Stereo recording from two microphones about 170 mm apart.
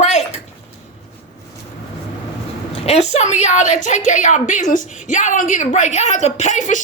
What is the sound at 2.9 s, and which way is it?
A woman's voice, 40° left (ahead or behind).